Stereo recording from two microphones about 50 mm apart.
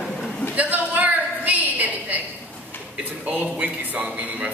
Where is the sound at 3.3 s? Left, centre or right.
Right.